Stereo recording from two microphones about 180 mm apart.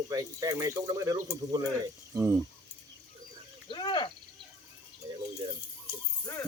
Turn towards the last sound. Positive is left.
turn(degrees=20)  # may be behind; listen again after turning